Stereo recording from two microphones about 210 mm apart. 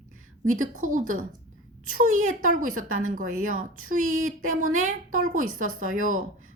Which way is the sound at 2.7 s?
80° right.